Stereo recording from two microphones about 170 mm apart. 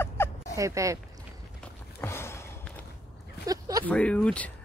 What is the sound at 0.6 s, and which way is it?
Speech, 20° right (ahead or behind).